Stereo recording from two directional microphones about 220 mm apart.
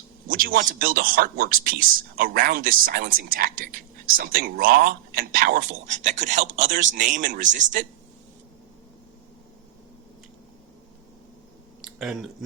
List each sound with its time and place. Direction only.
0.3 s speech: 40° right (ahead or behind)
11.9 s speech: centre (ahead or behind)